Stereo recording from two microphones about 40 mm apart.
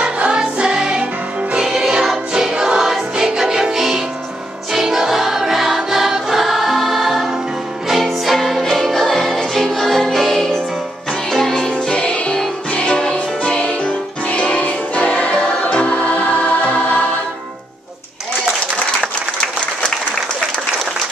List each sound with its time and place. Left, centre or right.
0.0 s music: right
6.4 s choir: centre
7.9 s music: centre
8.9 s music: centre
11.9 s music: left